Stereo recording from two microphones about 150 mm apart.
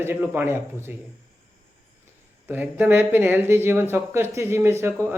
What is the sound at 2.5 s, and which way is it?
Speech, 10° right (ahead or behind).